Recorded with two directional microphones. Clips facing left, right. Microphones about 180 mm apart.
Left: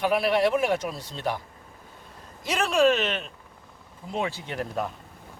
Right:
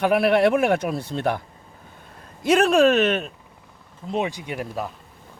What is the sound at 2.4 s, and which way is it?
Speech, 55° right (ahead or behind).